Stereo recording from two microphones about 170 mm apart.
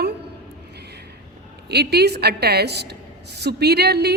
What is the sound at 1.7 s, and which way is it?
A woman's voice, 70° right (ahead or behind).